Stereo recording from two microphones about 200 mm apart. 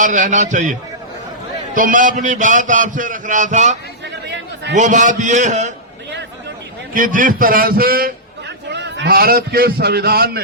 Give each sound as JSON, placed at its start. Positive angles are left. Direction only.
{"t": 0.0, "sound": "a man's voice", "side_deg": -40}
{"t": 4.1, "sound": "chatter", "side_deg": -60}
{"t": 4.7, "sound": "a man's voice", "side_deg": -40}
{"t": 6.9, "sound": "a man's voice", "side_deg": -40}